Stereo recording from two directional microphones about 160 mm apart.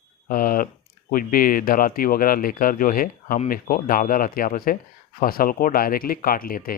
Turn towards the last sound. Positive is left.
turn(degrees=65)  # may be behind; listen again after turning